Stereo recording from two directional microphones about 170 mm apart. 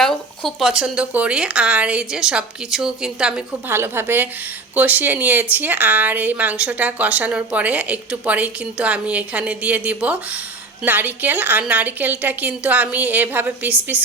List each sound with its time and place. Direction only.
0.0 s a woman's voice: centre (ahead or behind)